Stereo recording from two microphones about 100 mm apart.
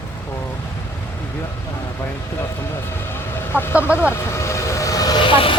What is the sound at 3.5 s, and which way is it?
Speech, 20° left (ahead or behind).